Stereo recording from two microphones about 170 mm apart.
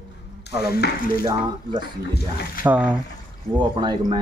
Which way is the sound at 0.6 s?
70° left (ahead or behind).